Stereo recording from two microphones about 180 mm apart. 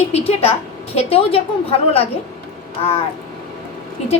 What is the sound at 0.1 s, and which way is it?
A woman's voice, 35° left (ahead or behind).